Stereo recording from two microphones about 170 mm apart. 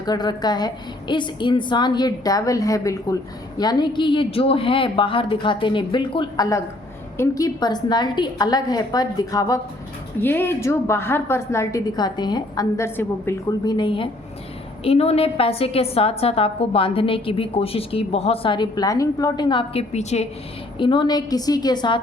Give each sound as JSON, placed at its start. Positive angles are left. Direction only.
{"t": 0.0, "sound": "a woman's voice", "side_deg": 25}
{"t": 13.7, "sound": "a woman's voice", "side_deg": 25}
{"t": 20.7, "sound": "a woman's voice", "side_deg": 30}